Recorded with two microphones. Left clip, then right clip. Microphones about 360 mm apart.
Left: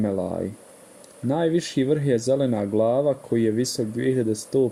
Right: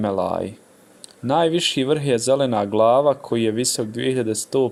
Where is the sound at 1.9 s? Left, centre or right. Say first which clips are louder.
Right 2 dB; right.